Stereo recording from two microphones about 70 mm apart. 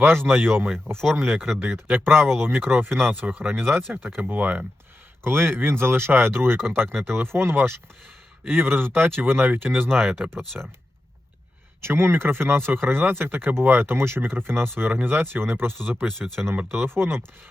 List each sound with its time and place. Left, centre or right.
0.0 s speech: right
3.5 s speech: right
5.2 s speech: right
10.2 s speech: right
11.8 s speech: right
16.1 s speech: centre
16.7 s speech: right